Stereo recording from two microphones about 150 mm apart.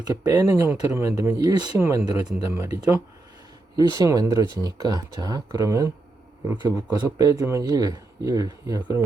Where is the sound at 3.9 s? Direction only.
25° right (ahead or behind).